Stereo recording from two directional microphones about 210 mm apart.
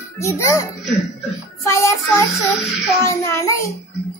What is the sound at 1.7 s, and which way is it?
A child's voice, 15° left (ahead or behind).